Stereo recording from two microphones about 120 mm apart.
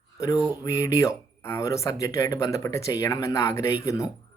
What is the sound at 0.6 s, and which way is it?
Speech, 25° left (ahead or behind).